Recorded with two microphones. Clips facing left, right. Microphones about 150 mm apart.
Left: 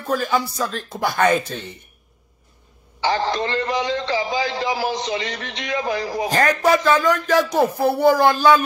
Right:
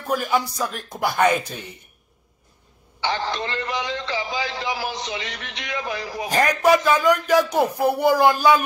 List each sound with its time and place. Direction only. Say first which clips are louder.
0.0 s speech: left 1 dB; 10° right (ahead or behind)
3.0 s a man's voice: left 4 dB; 40° left (ahead or behind)
6.6 s speech: right 1 dB; 10° right (ahead or behind)